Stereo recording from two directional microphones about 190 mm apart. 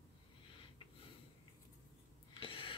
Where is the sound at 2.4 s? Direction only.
30° left (ahead or behind).